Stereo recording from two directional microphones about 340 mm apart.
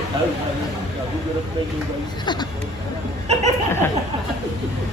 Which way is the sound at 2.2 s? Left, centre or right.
Centre.